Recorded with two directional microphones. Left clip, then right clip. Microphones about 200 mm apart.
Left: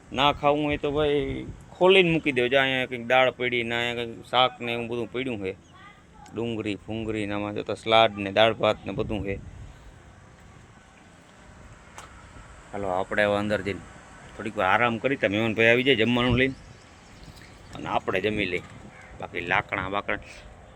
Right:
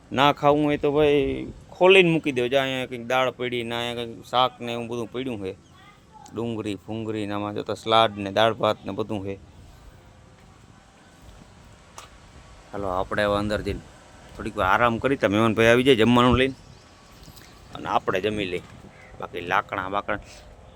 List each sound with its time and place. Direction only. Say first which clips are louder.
0.1 s a man's voice: right 3 dB; 35° right (ahead or behind)
2.1 s speech: even; 20° right (ahead or behind)
12.7 s speech: even; 10° right (ahead or behind); by 16.5 s 30° right (ahead or behind)
17.7 s speech: right 3 dB; 30° right (ahead or behind); by 20.2 s 15° right (ahead or behind)